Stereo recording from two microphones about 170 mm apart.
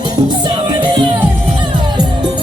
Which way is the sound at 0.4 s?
25° right (ahead or behind).